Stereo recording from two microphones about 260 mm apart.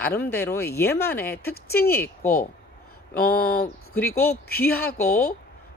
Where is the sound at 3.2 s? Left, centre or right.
Left.